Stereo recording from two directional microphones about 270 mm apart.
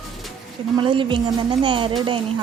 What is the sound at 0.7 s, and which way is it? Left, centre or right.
A woman's voice, centre.